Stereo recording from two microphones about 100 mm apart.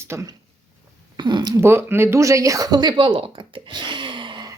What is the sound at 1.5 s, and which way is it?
Speech, 25° right (ahead or behind).